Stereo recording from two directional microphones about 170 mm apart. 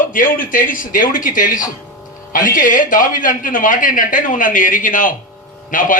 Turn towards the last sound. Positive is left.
turn(degrees=50)  # may be behind; listen again after turning